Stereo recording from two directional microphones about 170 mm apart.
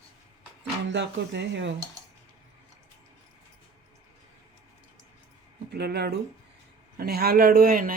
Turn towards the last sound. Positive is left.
turn(degrees=-55)  # may be behind; listen again after turning